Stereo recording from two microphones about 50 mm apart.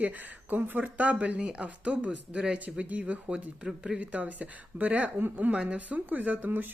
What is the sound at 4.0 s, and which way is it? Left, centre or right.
Speech, right.